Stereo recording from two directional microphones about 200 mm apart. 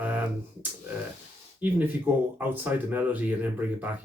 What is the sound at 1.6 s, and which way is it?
Speech, 10° right (ahead or behind).